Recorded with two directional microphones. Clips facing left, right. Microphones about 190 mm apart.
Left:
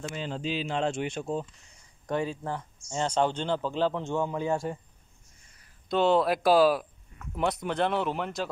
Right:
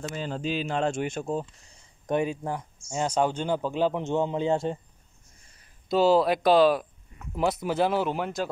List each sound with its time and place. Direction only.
0.0 s speech: 45° right (ahead or behind)
2.0 s speech: 15° right (ahead or behind)
5.9 s speech: 5° right (ahead or behind)